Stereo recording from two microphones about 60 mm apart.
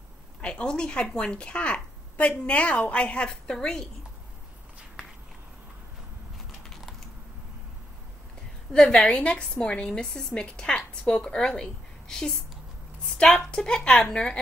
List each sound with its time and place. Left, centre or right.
0.4 s a woman's voice: centre
6.7 s typing: centre
8.7 s a woman's voice: centre